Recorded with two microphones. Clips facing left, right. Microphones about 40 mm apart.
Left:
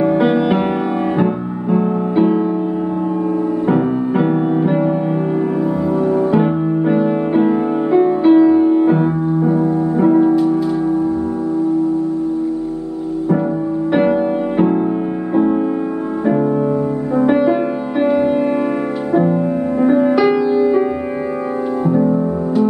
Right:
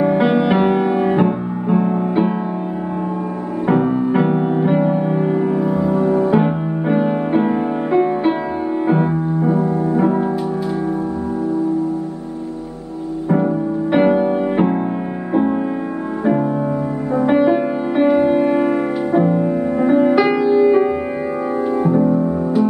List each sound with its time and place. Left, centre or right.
0.0 s music: centre
4.1 s music: centre
5.9 s music: right
6.3 s music: centre
13.9 s music: centre
17.3 s music: centre
19.9 s music: centre